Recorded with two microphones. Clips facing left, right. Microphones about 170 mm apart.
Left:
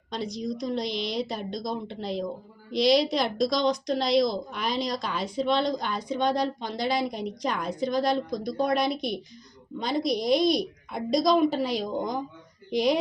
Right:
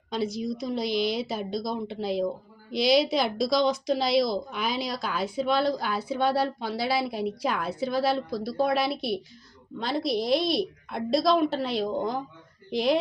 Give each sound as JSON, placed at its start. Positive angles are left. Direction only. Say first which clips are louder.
{"t": 0.1, "sound": "a woman's voice", "louder": "right 2 dB", "side_deg": -5}